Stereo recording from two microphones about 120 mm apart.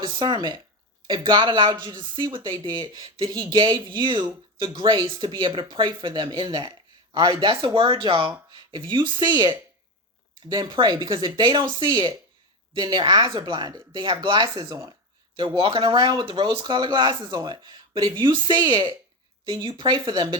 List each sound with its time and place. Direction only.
0.0 s speech: 40° right (ahead or behind)
8.4 s a sound: 40° right (ahead or behind)
8.9 s speech: 45° right (ahead or behind)